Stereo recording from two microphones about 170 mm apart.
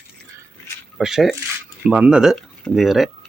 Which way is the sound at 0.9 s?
Centre (ahead or behind).